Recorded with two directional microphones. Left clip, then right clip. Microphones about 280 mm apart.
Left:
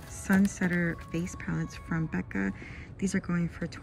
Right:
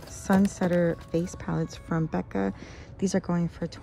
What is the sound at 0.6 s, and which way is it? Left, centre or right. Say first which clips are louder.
Speech: right 6 dB; centre.